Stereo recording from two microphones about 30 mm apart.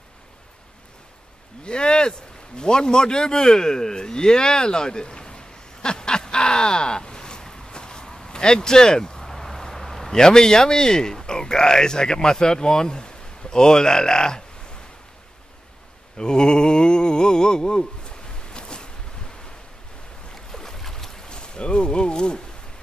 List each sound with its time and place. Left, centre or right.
1.6 s a sound: left
9.2 s speech: centre
16.2 s mantra: left
20.5 s boat: centre
21.3 s speech: left